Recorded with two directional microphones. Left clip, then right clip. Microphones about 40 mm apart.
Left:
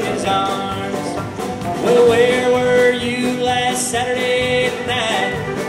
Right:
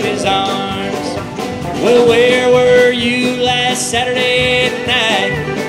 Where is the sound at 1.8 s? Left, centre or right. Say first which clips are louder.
Right 3 dB; right.